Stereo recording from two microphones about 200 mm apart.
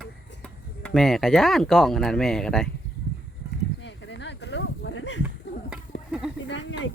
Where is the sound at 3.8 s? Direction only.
60° left (ahead or behind).